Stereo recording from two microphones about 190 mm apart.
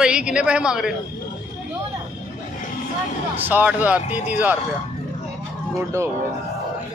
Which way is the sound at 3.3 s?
10° right (ahead or behind).